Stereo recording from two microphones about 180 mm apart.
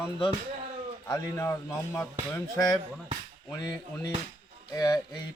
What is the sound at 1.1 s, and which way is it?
Speech, 15° left (ahead or behind).